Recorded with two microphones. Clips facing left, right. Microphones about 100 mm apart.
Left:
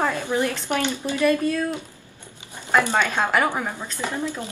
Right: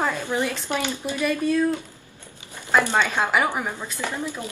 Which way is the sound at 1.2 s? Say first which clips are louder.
Left 3 dB; 10° right (ahead or behind).